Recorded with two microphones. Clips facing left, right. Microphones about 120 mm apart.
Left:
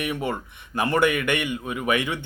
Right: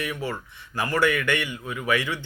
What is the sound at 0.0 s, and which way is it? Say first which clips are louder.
Speech: left 3 dB; 20° left (ahead or behind).